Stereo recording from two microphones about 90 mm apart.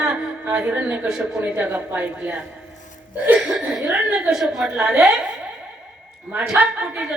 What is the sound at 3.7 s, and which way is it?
Music, 10° right (ahead or behind).